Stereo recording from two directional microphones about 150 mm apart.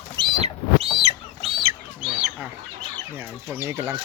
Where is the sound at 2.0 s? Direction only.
5° right (ahead or behind).